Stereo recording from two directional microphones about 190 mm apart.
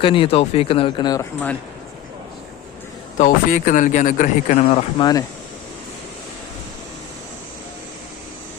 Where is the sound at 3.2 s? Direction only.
45° left (ahead or behind).